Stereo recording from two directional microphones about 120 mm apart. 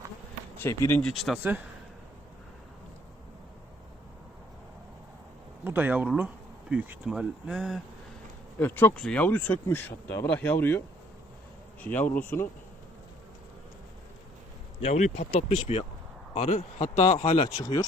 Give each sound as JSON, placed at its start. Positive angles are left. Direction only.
{"t": 0.6, "sound": "speech", "side_deg": 20}
{"t": 0.9, "sound": "speech", "side_deg": 5}
{"t": 1.4, "sound": "speech", "side_deg": -15}
{"t": 5.6, "sound": "speech", "side_deg": -15}
{"t": 8.5, "sound": "speech", "side_deg": 15}
{"t": 14.8, "sound": "speech", "side_deg": 70}
{"t": 17.2, "sound": "speech", "side_deg": 55}
{"t": 17.6, "sound": "speech", "side_deg": 35}